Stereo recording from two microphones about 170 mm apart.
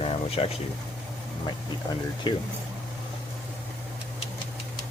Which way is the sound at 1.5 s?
25° left (ahead or behind).